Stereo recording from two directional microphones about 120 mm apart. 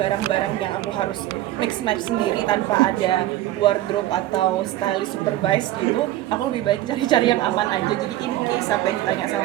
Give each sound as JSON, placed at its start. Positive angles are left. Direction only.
{"t": 2.5, "sound": "a woman's voice", "side_deg": 40}
{"t": 6.7, "sound": "a woman's voice", "side_deg": 40}